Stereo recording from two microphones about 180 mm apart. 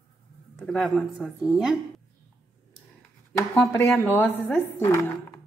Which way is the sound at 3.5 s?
10° left (ahead or behind).